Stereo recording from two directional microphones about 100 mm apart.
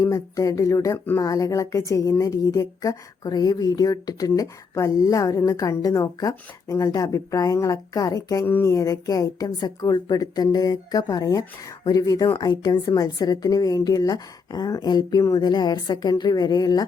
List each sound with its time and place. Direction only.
0.0 s a woman's voice: 30° left (ahead or behind)